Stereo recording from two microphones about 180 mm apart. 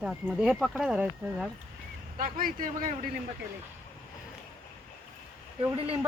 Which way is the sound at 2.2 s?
50° right (ahead or behind).